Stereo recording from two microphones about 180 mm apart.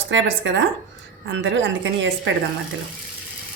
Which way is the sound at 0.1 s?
90° right.